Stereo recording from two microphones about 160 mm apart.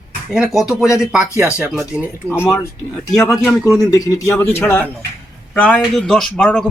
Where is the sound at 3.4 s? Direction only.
10° left (ahead or behind).